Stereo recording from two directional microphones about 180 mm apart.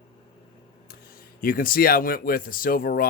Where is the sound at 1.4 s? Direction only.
50° left (ahead or behind).